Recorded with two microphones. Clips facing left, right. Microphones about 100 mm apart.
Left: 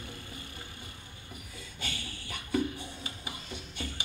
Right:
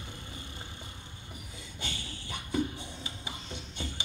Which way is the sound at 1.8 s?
20° right (ahead or behind).